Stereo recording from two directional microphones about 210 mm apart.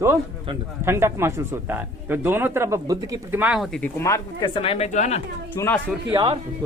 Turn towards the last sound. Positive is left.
turn(degrees=-25)  # may be behind; listen again after turning